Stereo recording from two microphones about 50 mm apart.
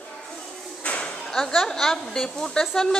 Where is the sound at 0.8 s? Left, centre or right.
Left.